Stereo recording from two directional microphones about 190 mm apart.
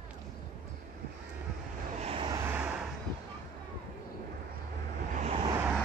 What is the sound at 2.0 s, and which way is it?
Vehicle, 30° right (ahead or behind).